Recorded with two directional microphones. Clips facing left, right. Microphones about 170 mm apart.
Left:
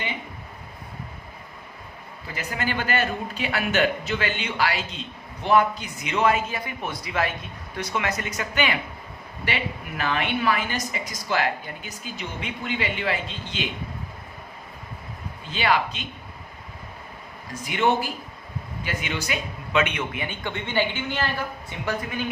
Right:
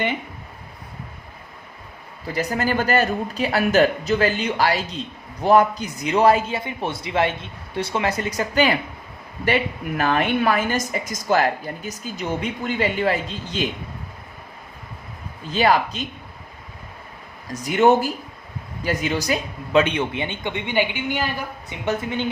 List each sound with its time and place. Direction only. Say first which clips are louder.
2.2 s a man's voice: right 7 dB; 40° right (ahead or behind)
10.0 s speech: right 5 dB; 45° right (ahead or behind)
15.4 s a man's voice: right 5 dB; 40° right (ahead or behind)
17.5 s a man's voice: right 7 dB; 40° right (ahead or behind); by 21.2 s 15° right (ahead or behind)
21.7 s a man's voice: right 7 dB; 25° right (ahead or behind)